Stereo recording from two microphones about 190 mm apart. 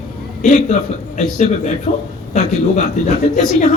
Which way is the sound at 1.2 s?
40° left (ahead or behind).